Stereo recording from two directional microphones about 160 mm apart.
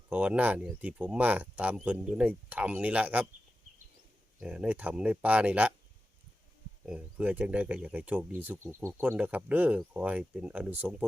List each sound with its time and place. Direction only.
0.1 s speech: 10° right (ahead or behind)
4.4 s speech: 5° right (ahead or behind)
6.8 s speech: 10° right (ahead or behind)